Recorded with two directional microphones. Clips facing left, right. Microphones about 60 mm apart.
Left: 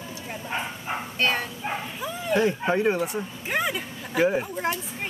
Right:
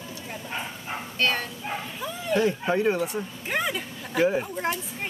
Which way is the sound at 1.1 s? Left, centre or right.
Centre.